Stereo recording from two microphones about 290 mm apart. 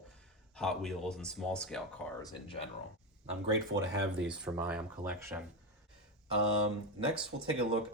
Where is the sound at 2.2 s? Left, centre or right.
Centre.